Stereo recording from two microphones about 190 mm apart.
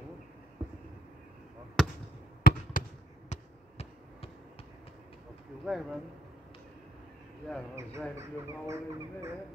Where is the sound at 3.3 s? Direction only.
40° left (ahead or behind).